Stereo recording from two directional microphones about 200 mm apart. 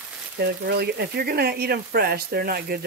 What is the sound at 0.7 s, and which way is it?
Speech, 55° right (ahead or behind).